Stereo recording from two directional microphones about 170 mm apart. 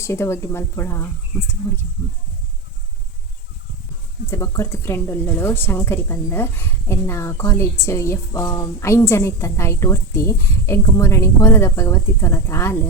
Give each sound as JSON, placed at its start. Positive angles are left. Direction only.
{"t": 0.0, "sound": "a woman's voice", "side_deg": 15}
{"t": 4.3, "sound": "a woman's voice", "side_deg": 15}